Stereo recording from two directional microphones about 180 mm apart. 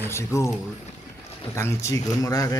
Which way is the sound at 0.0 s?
15° left (ahead or behind).